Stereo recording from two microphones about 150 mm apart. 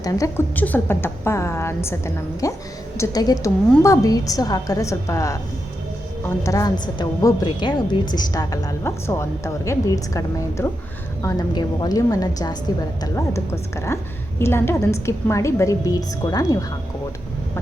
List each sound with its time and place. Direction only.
0.0 s a woman's voice: 20° left (ahead or behind)
0.5 s a woman's voice: 10° left (ahead or behind)